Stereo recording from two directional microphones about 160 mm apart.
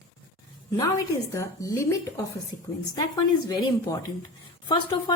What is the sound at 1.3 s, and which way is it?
Speech, 20° left (ahead or behind).